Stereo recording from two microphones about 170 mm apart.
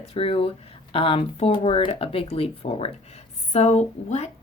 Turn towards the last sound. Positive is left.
turn(degrees=40)  # may be behind; listen again after turning